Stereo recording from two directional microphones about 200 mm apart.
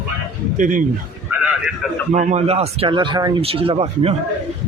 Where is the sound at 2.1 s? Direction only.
35° right (ahead or behind).